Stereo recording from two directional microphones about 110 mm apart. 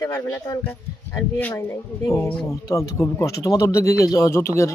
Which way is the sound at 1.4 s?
20° left (ahead or behind).